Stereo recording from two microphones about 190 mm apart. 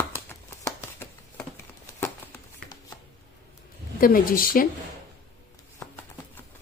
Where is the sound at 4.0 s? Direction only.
50° left (ahead or behind).